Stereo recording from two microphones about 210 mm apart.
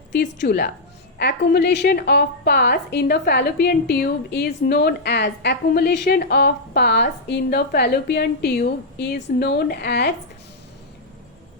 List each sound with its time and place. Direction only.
0.1 s a woman's voice: 55° left (ahead or behind)